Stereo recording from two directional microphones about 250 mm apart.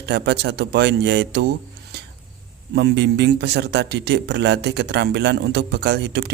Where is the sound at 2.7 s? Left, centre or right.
Right.